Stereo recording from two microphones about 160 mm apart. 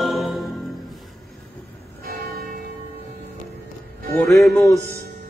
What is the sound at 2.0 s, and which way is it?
Music, 70° right (ahead or behind).